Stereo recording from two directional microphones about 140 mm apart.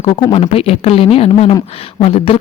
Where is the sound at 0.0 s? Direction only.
35° left (ahead or behind).